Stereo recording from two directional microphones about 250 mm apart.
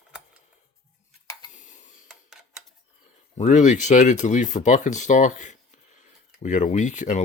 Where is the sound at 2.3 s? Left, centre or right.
Centre.